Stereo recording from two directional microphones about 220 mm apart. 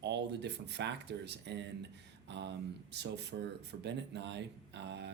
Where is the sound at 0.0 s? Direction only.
50° right (ahead or behind).